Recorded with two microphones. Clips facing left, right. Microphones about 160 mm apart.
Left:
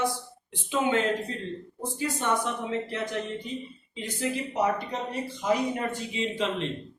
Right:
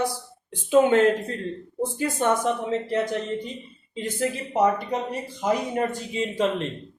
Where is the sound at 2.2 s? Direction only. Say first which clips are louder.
Right 6 dB; 50° right (ahead or behind).